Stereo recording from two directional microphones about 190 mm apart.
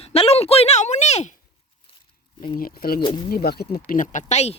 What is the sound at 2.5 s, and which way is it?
Speech, 50° left (ahead or behind).